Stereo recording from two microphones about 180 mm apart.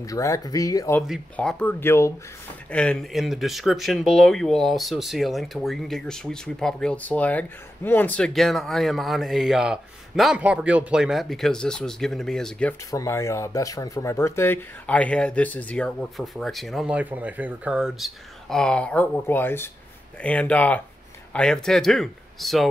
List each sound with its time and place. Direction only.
0.0 s speech: 20° left (ahead or behind)
1.0 s speech: centre (ahead or behind)
12.9 s speech: 15° left (ahead or behind); by 22.7 s centre (ahead or behind)